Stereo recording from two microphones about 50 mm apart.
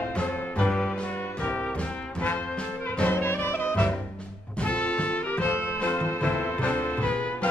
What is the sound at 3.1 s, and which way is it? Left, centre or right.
Music, left.